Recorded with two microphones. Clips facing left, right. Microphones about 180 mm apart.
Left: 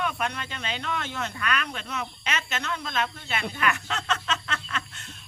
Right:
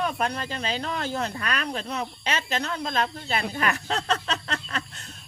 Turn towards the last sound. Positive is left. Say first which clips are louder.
# right 2 dB
turn(degrees=-40)  # may be behind; listen again after turning